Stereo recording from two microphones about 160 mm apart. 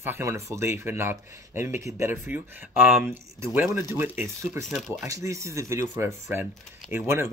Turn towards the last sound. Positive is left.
turn(degrees=-15)  # may be behind; listen again after turning